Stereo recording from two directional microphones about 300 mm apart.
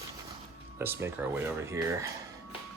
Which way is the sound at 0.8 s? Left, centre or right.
Centre.